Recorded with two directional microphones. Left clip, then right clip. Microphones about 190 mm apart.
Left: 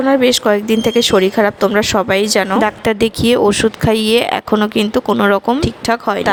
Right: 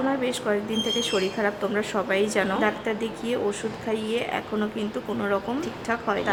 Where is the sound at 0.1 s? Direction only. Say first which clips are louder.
Left 14 dB; 40° left (ahead or behind).